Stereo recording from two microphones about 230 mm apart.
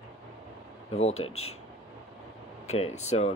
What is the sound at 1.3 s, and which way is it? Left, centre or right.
Speech, left.